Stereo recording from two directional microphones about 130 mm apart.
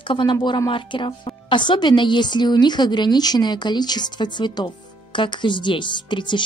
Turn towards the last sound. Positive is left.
turn(degrees=35)  # may be behind; listen again after turning